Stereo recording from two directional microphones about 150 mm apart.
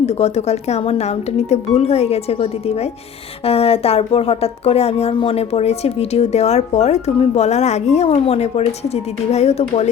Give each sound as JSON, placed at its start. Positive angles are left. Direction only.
{"t": 0.0, "sound": "speech", "side_deg": 45}